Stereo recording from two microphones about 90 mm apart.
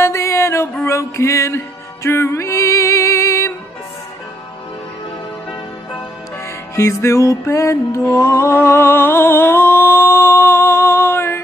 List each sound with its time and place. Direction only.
0.0 s music: 30° left (ahead or behind)
6.7 s music: 35° left (ahead or behind)